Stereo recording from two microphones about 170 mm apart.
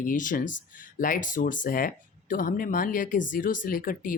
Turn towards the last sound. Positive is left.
turn(degrees=55)  # may be behind; listen again after turning